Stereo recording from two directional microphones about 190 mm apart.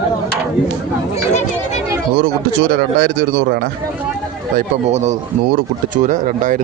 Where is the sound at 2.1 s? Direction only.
55° right (ahead or behind).